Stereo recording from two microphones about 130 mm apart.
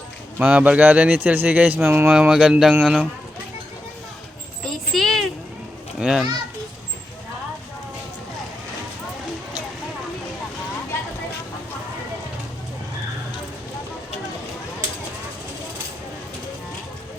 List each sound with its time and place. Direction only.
0.3 s speech: 10° right (ahead or behind)
2.1 s speech: 5° right (ahead or behind)
4.6 s a sound: centre (ahead or behind)
6.0 s children playing: 5° right (ahead or behind)